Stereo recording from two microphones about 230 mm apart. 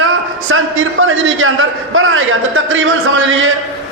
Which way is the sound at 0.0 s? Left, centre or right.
Right.